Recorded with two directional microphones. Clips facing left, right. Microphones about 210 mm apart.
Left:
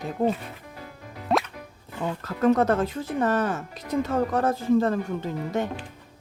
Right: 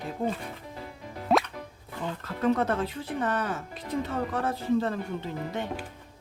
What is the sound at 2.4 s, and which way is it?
Speech, 45° left (ahead or behind).